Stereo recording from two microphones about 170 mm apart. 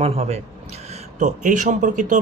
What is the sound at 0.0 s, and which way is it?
Speech, 35° right (ahead or behind).